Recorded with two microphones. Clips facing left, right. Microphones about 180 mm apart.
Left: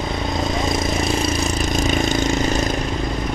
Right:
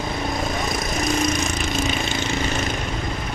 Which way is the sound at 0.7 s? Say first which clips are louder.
Left 3 dB; 25° left (ahead or behind).